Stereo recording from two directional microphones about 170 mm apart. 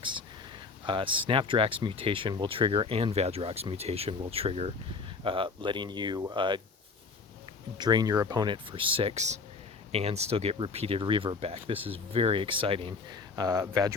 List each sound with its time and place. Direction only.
0.9 s speech: 30° right (ahead or behind)
7.8 s speech: 25° right (ahead or behind)